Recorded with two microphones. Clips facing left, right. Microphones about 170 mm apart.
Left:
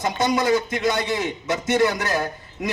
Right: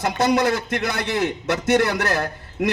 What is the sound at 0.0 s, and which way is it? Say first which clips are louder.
A man's voice: right 2 dB; 70° right (ahead or behind).